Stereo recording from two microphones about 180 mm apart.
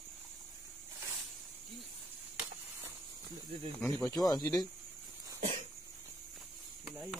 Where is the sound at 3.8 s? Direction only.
15° left (ahead or behind).